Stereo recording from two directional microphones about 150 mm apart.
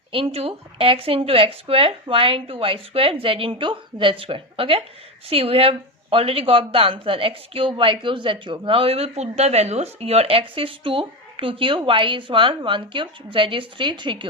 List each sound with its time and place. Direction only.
0.1 s a woman's voice: 40° right (ahead or behind)